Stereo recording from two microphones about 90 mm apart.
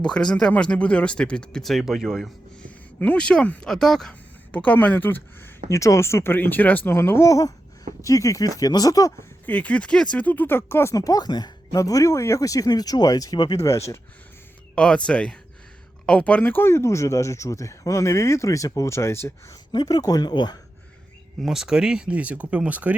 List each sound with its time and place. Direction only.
0.0 s speech: 10° left (ahead or behind)
2.6 s speech: 15° left (ahead or behind)
3.7 s speech: 5° left (ahead or behind)
4.1 s speech: 15° left (ahead or behind); by 9.1 s 40° left (ahead or behind)
9.5 s speech: 15° left (ahead or behind)
10.9 s speech: 45° left (ahead or behind)
13.6 s speech: 30° left (ahead or behind)
14.8 s speech: 10° left (ahead or behind); by 19.5 s 30° left (ahead or behind)
19.7 s speech: 45° left (ahead or behind)
21.4 s speech: 5° right (ahead or behind)